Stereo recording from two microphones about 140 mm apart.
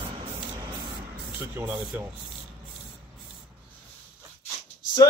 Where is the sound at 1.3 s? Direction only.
15° right (ahead or behind).